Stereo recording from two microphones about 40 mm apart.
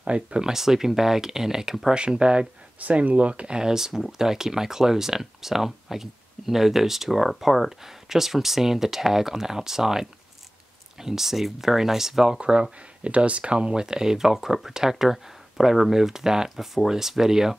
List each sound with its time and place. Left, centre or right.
0.0 s speech: right
0.5 s speech: centre
2.0 s speech: right
2.8 s speech: right
3.5 s speech: centre
12.4 s speech: right